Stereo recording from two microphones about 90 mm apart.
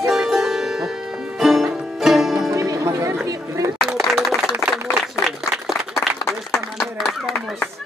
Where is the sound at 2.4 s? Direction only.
40° right (ahead or behind).